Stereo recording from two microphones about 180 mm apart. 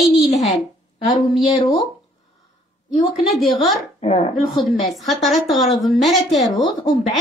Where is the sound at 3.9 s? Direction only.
35° left (ahead or behind).